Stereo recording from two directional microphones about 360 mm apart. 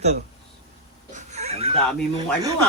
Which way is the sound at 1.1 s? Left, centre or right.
Centre.